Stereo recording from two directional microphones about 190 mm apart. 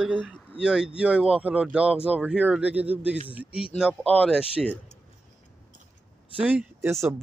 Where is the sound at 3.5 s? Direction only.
30° left (ahead or behind).